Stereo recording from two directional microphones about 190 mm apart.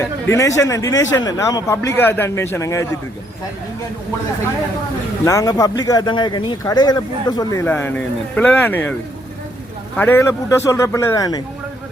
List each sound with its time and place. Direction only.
0.0 s speech: 15° left (ahead or behind)
5.2 s speech: 20° left (ahead or behind)
10.0 s speech: 10° left (ahead or behind)